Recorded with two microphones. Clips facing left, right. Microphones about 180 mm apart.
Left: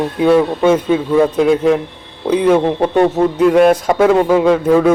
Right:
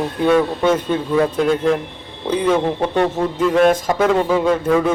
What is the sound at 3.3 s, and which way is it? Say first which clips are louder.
A man's voice: left 4 dB; 10° left (ahead or behind).